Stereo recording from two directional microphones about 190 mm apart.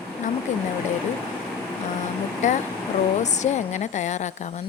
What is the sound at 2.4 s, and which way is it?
Speech, 40° left (ahead or behind).